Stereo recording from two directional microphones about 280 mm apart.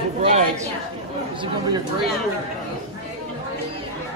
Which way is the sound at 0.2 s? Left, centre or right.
Right.